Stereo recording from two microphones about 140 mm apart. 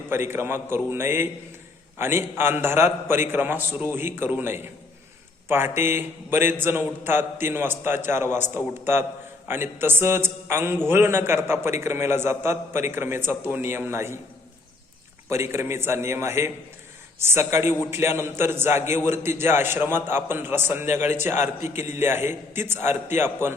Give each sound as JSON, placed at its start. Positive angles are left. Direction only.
{"t": 0.1, "sound": "a man's voice", "side_deg": -15}
{"t": 15.3, "sound": "a man's voice", "side_deg": -20}